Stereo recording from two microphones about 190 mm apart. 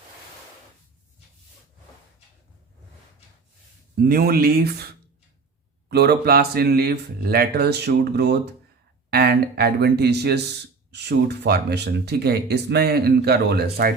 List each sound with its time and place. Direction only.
4.0 s speech: 55° right (ahead or behind)
5.9 s speech: 55° right (ahead or behind)